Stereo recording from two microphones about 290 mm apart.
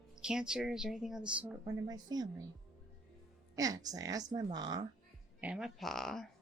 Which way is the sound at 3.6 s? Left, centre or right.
Centre.